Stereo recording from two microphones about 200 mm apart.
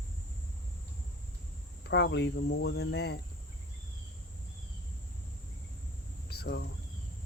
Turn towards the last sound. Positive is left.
turn(degrees=55)  # may be behind; listen again after turning